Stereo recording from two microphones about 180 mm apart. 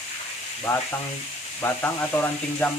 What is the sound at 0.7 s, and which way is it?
Speech, 15° left (ahead or behind).